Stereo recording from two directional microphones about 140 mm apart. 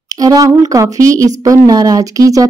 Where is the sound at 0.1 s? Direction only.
25° right (ahead or behind).